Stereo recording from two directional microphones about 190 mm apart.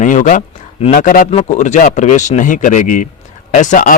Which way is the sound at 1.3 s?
35° left (ahead or behind).